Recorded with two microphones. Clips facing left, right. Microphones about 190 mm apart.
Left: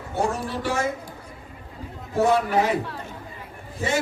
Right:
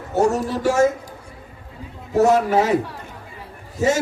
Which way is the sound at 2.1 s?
40° right (ahead or behind).